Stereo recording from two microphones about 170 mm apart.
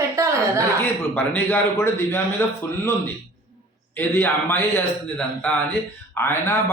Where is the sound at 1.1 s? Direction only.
10° left (ahead or behind).